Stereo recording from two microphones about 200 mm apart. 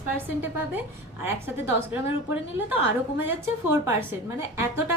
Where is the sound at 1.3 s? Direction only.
10° right (ahead or behind).